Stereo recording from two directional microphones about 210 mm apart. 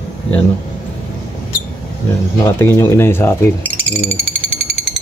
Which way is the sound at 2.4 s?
10° left (ahead or behind).